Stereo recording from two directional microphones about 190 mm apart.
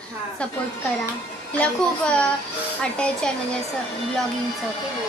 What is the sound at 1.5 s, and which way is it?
A woman's voice, 5° left (ahead or behind).